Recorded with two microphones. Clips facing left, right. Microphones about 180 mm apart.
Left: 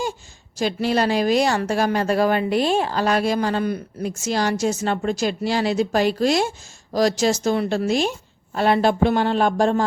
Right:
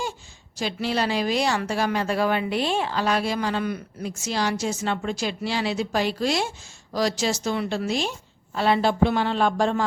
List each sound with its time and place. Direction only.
0.6 s speech: 45° left (ahead or behind)